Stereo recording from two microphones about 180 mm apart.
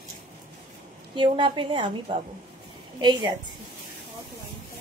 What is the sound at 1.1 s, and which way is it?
A woman's voice, 25° right (ahead or behind).